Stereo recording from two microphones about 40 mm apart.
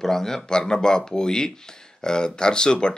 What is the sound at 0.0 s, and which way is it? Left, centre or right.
Speech, centre.